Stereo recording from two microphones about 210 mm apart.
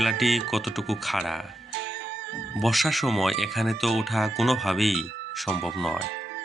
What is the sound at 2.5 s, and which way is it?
Speech, centre (ahead or behind).